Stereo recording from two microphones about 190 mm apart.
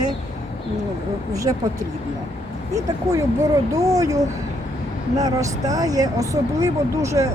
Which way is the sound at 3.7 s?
15° right (ahead or behind).